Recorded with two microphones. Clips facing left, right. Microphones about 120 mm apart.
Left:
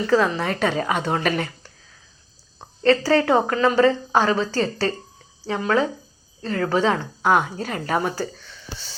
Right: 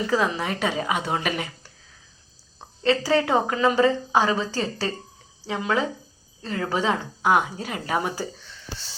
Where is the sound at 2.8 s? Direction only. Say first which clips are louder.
Left 4 dB; 10° right (ahead or behind).